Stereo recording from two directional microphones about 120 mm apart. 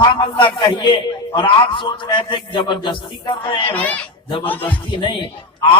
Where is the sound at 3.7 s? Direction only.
15° left (ahead or behind).